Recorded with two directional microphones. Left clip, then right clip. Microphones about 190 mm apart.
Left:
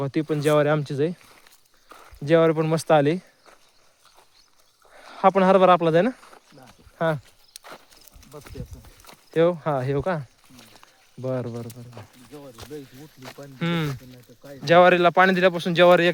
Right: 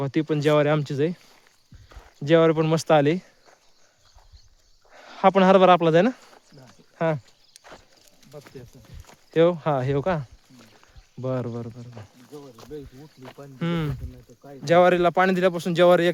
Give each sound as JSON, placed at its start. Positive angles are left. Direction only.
{"t": 0.0, "sound": "speech", "side_deg": -20}
{"t": 1.9, "sound": "clip-clop", "side_deg": 45}
{"t": 2.2, "sound": "speech", "side_deg": -20}
{"t": 4.9, "sound": "speech", "side_deg": -20}
{"t": 7.5, "sound": "horse", "side_deg": 45}
{"t": 9.3, "sound": "speech", "side_deg": -20}
{"t": 12.6, "sound": "speech", "side_deg": 50}
{"t": 13.2, "sound": "speech", "side_deg": 60}
{"t": 13.6, "sound": "speech", "side_deg": -15}